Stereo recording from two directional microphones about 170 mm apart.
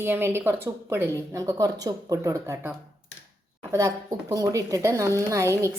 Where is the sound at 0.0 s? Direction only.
15° right (ahead or behind).